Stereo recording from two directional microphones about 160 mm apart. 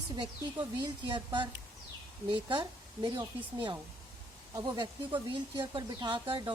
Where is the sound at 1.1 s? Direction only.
30° right (ahead or behind).